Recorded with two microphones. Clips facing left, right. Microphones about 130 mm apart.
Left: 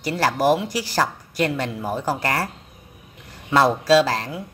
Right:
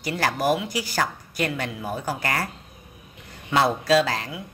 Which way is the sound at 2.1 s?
35° left (ahead or behind).